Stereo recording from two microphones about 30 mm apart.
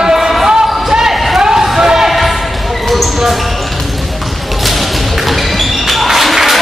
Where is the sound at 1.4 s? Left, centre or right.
Centre.